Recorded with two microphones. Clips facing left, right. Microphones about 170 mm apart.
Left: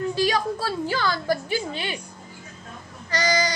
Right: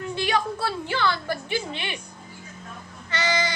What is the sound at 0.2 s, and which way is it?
A child's voice, 35° left (ahead or behind).